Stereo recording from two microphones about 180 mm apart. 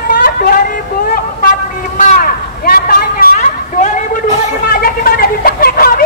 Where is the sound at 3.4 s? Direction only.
45° left (ahead or behind).